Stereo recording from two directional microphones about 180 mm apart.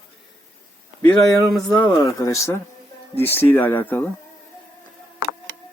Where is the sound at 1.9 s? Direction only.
20° left (ahead or behind).